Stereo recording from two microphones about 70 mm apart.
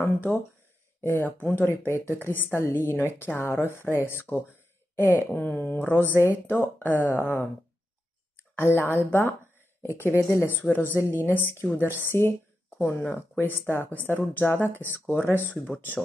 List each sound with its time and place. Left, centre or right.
1.0 s speech: left
8.5 s speech: left